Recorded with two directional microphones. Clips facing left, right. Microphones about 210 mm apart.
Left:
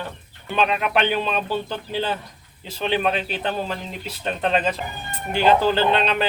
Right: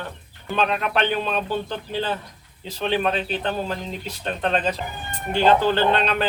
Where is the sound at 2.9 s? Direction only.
10° left (ahead or behind).